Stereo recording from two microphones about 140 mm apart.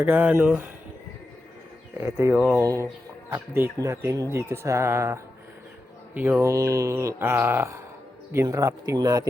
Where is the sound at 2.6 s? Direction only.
20° right (ahead or behind).